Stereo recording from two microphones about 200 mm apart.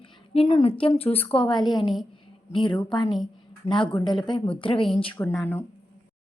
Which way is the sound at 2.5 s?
25° left (ahead or behind).